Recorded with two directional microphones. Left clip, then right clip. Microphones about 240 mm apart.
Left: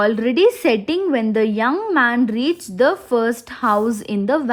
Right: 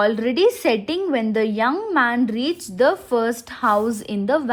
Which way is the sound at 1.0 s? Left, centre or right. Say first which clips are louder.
Left 3 dB; left.